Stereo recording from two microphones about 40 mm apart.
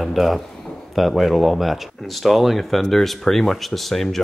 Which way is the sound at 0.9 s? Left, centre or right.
Centre.